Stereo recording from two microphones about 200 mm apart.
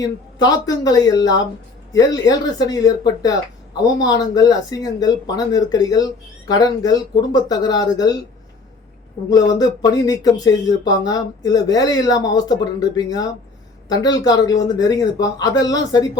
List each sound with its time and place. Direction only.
0.0 s speech: 20° left (ahead or behind)
9.3 s speech: 20° left (ahead or behind)